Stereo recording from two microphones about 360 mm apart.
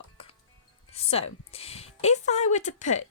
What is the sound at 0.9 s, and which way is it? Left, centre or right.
Music, centre.